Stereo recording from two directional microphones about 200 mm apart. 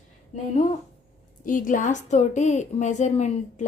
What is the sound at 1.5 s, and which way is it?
A woman's voice, 40° left (ahead or behind).